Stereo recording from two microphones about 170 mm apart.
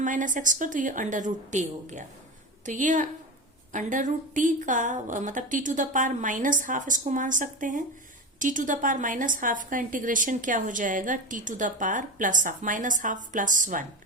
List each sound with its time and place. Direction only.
0.0 s a woman's voice: 50° right (ahead or behind)